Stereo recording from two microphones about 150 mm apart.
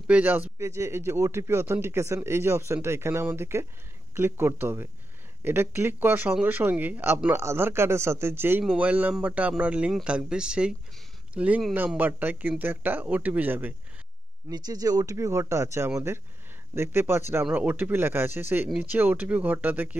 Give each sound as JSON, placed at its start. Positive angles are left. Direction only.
{"t": 0.0, "sound": "speech", "side_deg": -10}
{"t": 14.5, "sound": "speech", "side_deg": -25}